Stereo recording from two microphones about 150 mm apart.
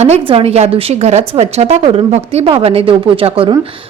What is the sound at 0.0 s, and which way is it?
Speech, 45° right (ahead or behind).